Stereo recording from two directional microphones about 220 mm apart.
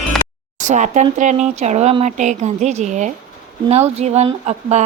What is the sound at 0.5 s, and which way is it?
Speech, 35° right (ahead or behind).